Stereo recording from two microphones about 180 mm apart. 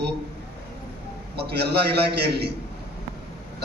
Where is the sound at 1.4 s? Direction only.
65° right (ahead or behind).